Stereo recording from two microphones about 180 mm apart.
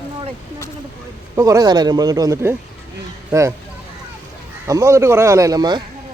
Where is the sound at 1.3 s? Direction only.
20° right (ahead or behind).